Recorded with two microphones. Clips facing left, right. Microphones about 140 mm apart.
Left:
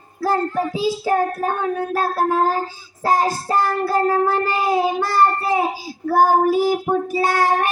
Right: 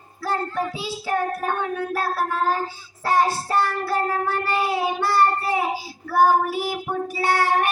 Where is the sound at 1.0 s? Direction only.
35° left (ahead or behind).